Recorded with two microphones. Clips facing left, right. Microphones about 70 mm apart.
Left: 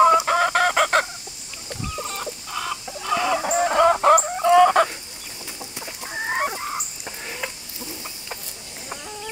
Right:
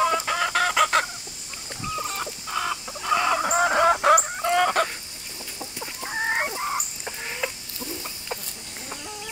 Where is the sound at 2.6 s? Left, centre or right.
Right.